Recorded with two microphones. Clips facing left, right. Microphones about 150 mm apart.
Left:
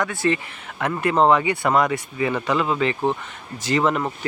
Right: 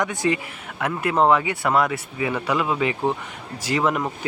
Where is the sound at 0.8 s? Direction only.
5° right (ahead or behind).